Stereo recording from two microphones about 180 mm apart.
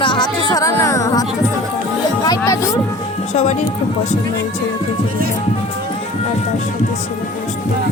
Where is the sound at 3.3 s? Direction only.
40° left (ahead or behind).